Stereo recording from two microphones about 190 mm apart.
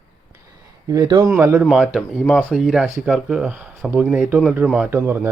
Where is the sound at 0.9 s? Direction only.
20° right (ahead or behind).